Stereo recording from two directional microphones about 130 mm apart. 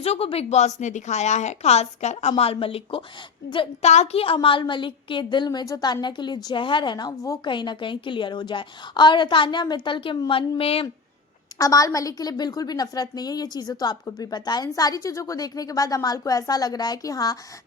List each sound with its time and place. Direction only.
0.0 s a woman's voice: 50° left (ahead or behind)
3.8 s a woman's voice: 60° left (ahead or behind); by 7.5 s 25° left (ahead or behind)
7.5 s a woman's voice: 35° left (ahead or behind)
11.5 s a woman's voice: 25° left (ahead or behind)